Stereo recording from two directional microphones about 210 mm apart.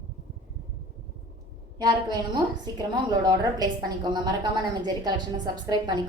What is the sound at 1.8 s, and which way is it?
A woman's voice, 20° right (ahead or behind).